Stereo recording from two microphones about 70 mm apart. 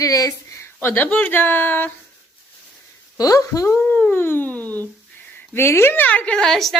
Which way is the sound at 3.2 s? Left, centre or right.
Left.